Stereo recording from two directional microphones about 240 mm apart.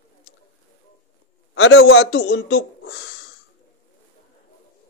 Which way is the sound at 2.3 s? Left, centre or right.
Left.